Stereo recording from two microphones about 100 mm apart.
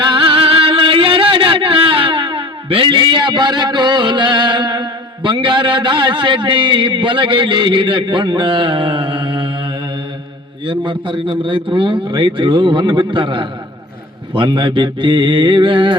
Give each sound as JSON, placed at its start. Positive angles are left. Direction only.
{"t": 0.0, "sound": "speech", "side_deg": -60}
{"t": 10.7, "sound": "a man's voice", "side_deg": -60}